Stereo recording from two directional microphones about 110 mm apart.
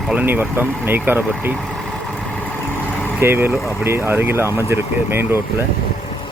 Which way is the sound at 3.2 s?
20° right (ahead or behind).